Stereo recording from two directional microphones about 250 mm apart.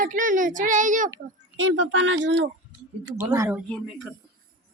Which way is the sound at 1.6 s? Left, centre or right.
Right.